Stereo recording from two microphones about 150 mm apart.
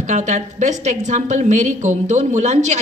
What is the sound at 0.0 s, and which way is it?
A woman's voice, 55° right (ahead or behind).